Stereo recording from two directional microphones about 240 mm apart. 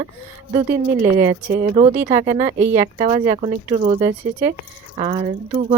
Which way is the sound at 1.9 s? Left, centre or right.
Centre.